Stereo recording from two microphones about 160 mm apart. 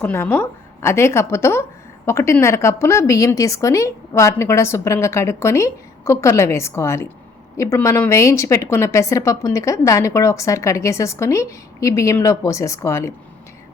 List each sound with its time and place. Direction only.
0.0 s a woman's voice: 15° left (ahead or behind)